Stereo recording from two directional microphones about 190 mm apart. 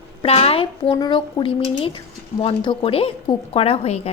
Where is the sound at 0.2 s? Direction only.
30° left (ahead or behind).